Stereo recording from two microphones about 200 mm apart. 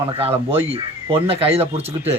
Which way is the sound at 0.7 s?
30° right (ahead or behind).